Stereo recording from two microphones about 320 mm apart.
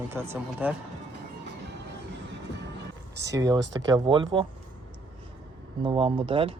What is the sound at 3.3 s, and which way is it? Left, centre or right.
Speech, centre.